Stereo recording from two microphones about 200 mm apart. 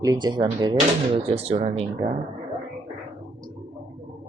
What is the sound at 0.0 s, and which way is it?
Speech, 20° right (ahead or behind).